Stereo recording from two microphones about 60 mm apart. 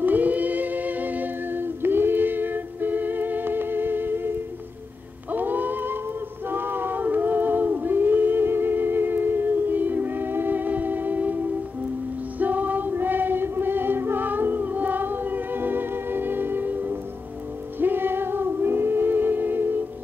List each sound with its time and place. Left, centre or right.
0.0 s music: right
5.3 s music: right
6.5 s a sound: right
12.4 s music: right